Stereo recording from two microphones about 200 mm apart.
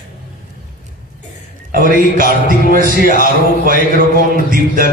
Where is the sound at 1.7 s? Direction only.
45° right (ahead or behind).